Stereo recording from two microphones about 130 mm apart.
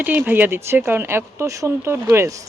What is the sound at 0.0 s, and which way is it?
Speech, 15° right (ahead or behind).